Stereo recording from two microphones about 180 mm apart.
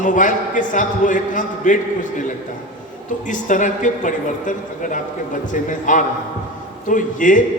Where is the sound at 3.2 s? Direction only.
45° left (ahead or behind).